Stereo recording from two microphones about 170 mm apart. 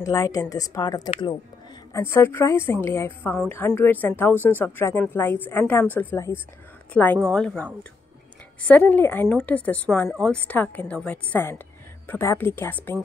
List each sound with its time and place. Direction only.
0.0 s speech: 20° left (ahead or behind)
2.0 s a woman's voice: 15° left (ahead or behind)
8.6 s speech: 10° left (ahead or behind)